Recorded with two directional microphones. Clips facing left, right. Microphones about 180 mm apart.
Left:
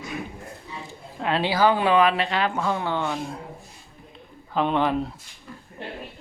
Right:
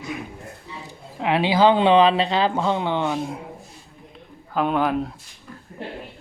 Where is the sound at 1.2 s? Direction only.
15° right (ahead or behind).